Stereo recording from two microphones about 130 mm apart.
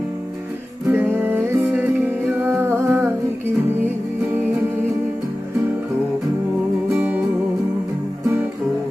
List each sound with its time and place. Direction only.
0.8 s music: 15° right (ahead or behind)